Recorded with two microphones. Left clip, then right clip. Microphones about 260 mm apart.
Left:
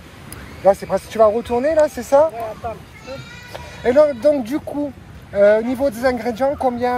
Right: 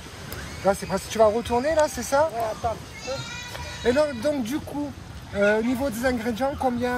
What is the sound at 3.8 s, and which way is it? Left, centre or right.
Speech, centre.